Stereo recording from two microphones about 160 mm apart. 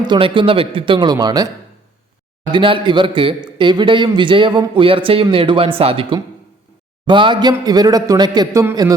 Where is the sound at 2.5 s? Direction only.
30° right (ahead or behind).